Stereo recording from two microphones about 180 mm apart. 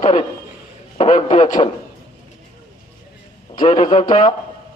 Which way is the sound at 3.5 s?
35° left (ahead or behind).